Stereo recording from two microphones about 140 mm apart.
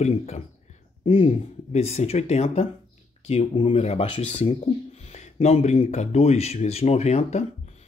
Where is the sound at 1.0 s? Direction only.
45° left (ahead or behind).